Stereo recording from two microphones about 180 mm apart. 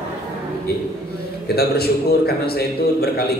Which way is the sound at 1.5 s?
60° left (ahead or behind).